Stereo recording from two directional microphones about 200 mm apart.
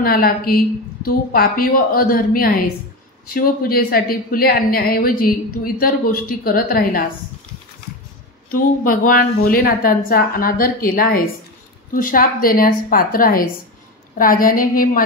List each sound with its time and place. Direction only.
0.0 s speech: 45° left (ahead or behind)
8.5 s speech: 45° left (ahead or behind)